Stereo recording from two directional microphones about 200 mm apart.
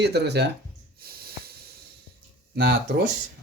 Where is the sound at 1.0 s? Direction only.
50° right (ahead or behind).